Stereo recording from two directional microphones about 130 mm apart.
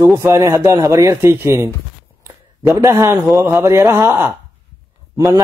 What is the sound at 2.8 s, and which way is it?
A man's voice, 25° right (ahead or behind).